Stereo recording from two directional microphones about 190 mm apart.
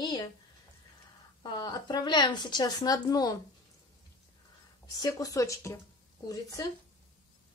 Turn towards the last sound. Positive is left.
turn(degrees=20)  # may be behind; listen again after turning